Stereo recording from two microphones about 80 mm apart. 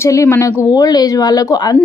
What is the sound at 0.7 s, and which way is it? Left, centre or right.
A woman's voice, left.